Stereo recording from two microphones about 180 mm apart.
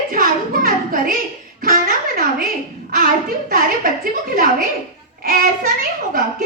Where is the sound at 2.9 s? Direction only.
55° right (ahead or behind).